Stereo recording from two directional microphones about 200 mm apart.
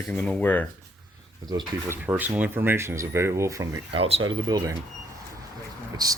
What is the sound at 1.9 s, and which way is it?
Speech, 10° right (ahead or behind).